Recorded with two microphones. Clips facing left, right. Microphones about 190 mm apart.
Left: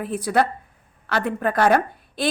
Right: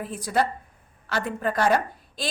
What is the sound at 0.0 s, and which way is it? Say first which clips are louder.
A woman's voice: left 4 dB; 60° left (ahead or behind).